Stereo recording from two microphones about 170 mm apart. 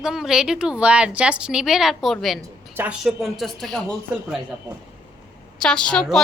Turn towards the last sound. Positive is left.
turn(degrees=5)  # may be behind; listen again after turning